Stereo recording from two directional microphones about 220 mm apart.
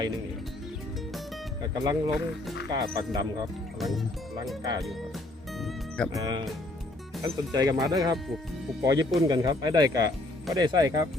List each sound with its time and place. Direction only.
1.6 s speech: 20° right (ahead or behind)
3.8 s speech: centre (ahead or behind)
5.5 s music: centre (ahead or behind)
6.1 s speech: 15° right (ahead or behind)